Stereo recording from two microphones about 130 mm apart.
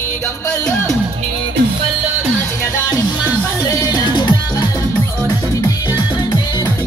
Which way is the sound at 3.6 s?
30° left (ahead or behind).